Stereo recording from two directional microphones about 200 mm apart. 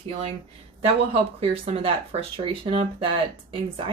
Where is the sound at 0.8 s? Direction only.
30° right (ahead or behind).